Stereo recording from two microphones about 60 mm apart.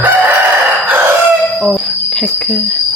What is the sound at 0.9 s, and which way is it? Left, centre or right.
Fowl, right.